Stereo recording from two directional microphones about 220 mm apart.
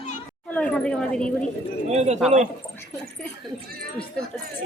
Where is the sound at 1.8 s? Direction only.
30° right (ahead or behind).